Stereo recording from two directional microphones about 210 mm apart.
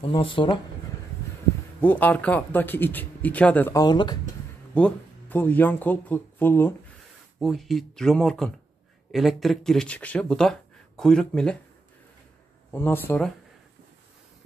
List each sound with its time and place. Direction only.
0.0 s speech: 25° left (ahead or behind)
1.8 s speech: 10° left (ahead or behind)
4.7 s speech: 5° left (ahead or behind)
7.3 s speech: centre (ahead or behind)
12.7 s speech: 10° left (ahead or behind)